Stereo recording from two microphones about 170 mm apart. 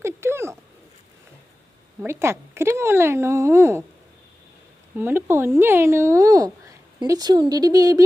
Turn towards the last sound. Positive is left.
turn(degrees=-20)  # may be behind; listen again after turning